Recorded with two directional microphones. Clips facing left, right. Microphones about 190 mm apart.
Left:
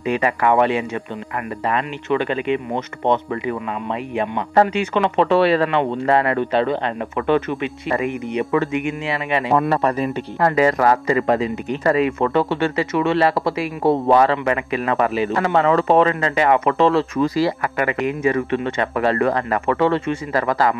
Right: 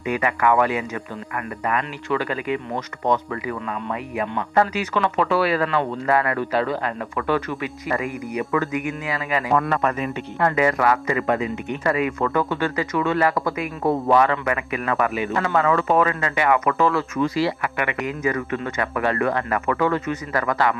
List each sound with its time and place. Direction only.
0.0 s speech: 30° left (ahead or behind)